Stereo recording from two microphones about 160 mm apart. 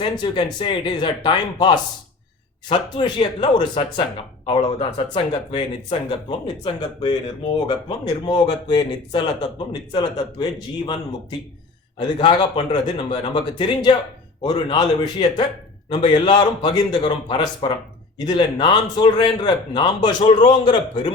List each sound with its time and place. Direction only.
0.0 s speech: 30° left (ahead or behind)